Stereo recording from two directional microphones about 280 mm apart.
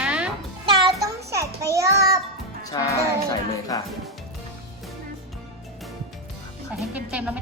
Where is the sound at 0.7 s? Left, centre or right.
Centre.